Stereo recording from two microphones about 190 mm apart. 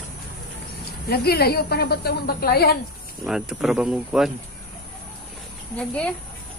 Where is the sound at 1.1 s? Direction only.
55° left (ahead or behind).